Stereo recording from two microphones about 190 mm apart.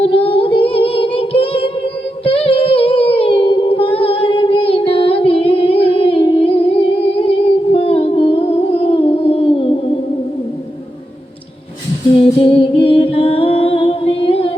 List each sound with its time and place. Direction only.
0.0 s child singing: 30° left (ahead or behind)
12.4 s music: 30° left (ahead or behind)